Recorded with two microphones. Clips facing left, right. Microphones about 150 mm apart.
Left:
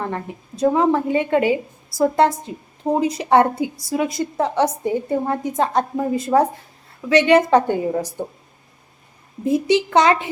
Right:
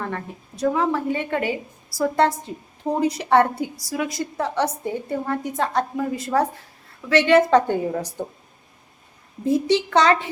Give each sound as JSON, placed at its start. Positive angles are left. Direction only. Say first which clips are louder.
{"t": 0.6, "sound": "a woman's voice", "louder": "left 4 dB", "side_deg": 25}
{"t": 9.4, "sound": "a woman's voice", "louder": "left 2 dB", "side_deg": 15}